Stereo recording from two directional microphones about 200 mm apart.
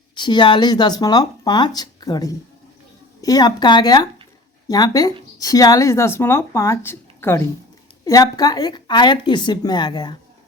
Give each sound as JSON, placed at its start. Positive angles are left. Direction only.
{"t": 0.2, "sound": "speech", "side_deg": 25}